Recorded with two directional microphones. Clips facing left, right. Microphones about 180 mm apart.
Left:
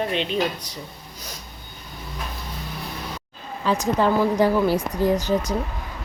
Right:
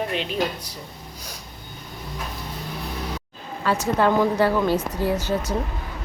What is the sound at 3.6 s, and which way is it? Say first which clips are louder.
Speech: even; 15° left (ahead or behind).